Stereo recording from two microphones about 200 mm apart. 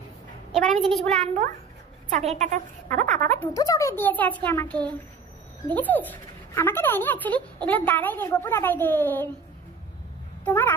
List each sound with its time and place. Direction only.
0.8 s a woman's voice: centre (ahead or behind)
2.2 s a woman's voice: 35° right (ahead or behind)
3.3 s speech: 15° left (ahead or behind)
10.4 s speech: 10° left (ahead or behind)